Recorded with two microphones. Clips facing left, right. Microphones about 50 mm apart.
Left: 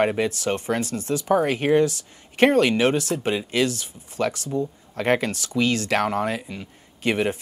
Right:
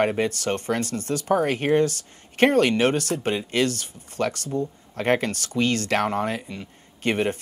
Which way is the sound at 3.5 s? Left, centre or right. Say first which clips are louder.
Left 1 dB; right.